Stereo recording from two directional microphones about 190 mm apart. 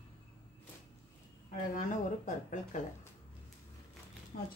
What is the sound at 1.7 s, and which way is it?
Speech, 40° left (ahead or behind).